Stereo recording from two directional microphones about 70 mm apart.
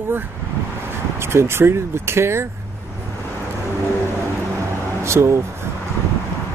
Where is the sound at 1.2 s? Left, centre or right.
Right.